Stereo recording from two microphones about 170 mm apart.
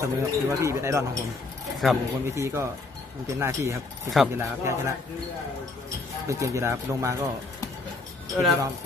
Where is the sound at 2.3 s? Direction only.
15° right (ahead or behind).